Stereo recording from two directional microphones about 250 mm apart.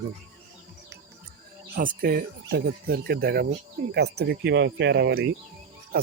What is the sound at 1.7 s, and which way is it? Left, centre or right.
Speech, right.